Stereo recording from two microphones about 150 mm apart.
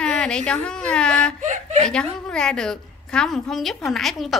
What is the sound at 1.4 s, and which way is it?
Speech, 55° right (ahead or behind).